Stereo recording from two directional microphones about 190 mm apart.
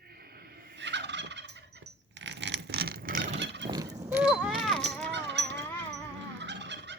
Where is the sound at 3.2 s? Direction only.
70° right (ahead or behind).